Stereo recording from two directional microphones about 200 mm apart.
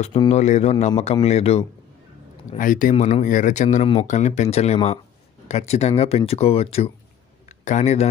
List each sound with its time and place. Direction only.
0.0 s a man's voice: 30° left (ahead or behind)